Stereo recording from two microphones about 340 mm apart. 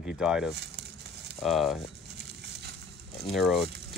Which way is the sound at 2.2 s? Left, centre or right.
Right.